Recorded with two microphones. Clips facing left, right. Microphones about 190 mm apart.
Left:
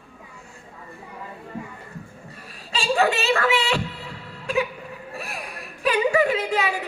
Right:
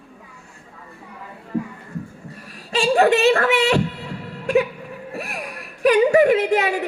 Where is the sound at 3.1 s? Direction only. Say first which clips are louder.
Right 6 dB; 55° right (ahead or behind).